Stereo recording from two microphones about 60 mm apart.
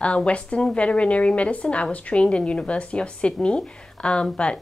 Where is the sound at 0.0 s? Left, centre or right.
Centre.